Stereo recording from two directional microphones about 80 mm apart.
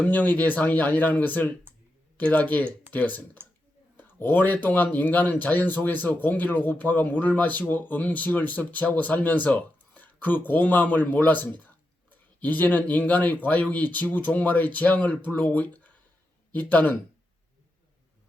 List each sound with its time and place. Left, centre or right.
0.0 s speech: centre